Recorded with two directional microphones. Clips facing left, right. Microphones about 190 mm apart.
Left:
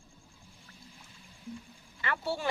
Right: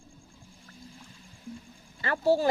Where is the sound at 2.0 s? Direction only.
35° right (ahead or behind).